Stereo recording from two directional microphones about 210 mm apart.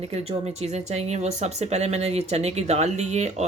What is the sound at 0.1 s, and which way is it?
Speech, 30° right (ahead or behind).